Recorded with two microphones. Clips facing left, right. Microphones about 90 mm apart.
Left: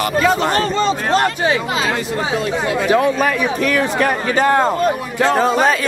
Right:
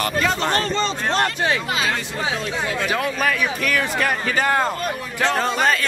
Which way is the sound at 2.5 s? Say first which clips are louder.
Left 7 dB; 5° left (ahead or behind).